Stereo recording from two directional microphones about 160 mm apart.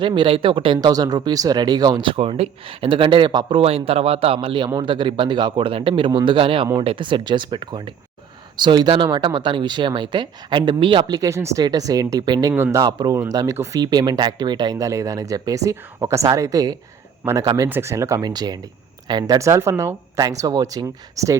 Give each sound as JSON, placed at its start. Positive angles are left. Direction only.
{"t": 0.0, "sound": "speech", "side_deg": -30}